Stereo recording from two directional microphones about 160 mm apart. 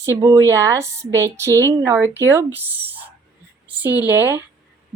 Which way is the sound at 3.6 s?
10° right (ahead or behind).